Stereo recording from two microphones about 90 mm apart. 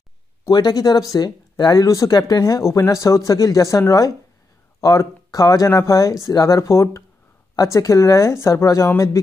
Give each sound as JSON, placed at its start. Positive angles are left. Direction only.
{"t": 0.5, "sound": "speech", "side_deg": 50}